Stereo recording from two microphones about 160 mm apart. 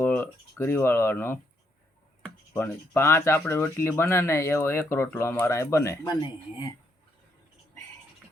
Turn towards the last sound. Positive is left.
turn(degrees=30)  # may be behind; listen again after turning